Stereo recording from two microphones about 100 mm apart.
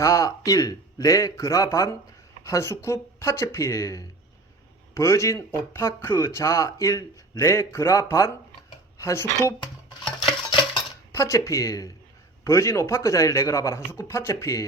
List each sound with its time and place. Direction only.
0.0 s a man's voice: 30° left (ahead or behind)
11.1 s a man's voice: 30° left (ahead or behind)